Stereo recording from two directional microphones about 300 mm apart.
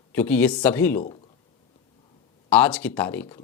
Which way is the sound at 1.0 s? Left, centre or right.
Centre.